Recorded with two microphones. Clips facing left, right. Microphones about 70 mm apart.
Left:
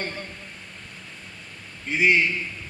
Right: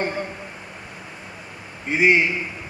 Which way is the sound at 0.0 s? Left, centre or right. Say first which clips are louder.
Right 7 dB; centre.